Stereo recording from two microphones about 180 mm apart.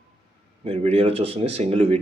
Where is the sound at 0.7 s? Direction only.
35° right (ahead or behind).